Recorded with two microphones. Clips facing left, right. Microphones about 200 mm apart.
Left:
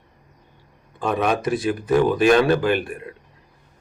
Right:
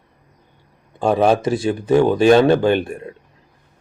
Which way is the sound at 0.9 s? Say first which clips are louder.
Right 6 dB; 30° right (ahead or behind).